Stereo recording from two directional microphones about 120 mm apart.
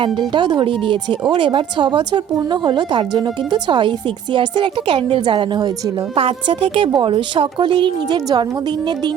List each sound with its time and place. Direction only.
0.0 s a woman's voice: 40° right (ahead or behind)